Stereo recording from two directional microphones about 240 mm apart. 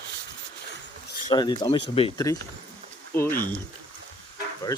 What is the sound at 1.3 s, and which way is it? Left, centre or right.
Speech, centre.